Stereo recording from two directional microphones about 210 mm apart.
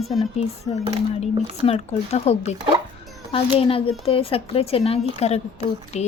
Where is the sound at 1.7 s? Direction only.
30° left (ahead or behind).